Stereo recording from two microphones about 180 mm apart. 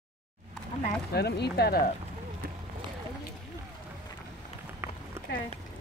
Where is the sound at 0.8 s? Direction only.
65° left (ahead or behind).